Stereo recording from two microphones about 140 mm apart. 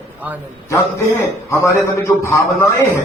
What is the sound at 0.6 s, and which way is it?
A man's voice, 20° left (ahead or behind).